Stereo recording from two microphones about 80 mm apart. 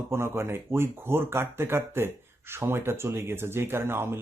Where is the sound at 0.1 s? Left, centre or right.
Right.